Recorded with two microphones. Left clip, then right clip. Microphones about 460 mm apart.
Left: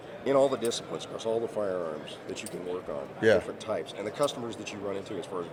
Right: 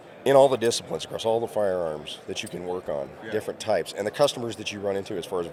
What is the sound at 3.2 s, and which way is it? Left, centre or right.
Speech, left.